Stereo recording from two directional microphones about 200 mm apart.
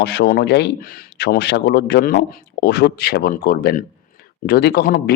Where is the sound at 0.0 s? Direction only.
55° left (ahead or behind).